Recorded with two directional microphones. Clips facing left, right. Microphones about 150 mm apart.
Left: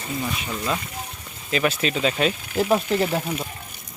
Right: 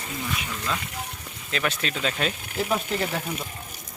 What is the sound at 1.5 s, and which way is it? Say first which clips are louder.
Speech: left 6 dB; 5° left (ahead or behind).